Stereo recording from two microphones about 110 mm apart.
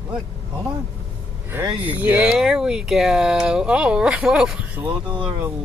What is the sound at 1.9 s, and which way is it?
Speech, 15° right (ahead or behind).